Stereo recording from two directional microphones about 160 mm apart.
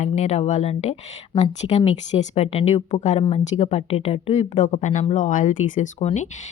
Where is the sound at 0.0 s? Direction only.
45° left (ahead or behind).